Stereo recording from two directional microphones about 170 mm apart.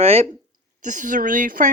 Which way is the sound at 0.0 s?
35° right (ahead or behind).